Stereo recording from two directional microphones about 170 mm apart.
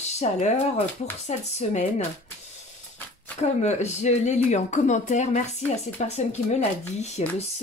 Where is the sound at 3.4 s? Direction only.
40° left (ahead or behind).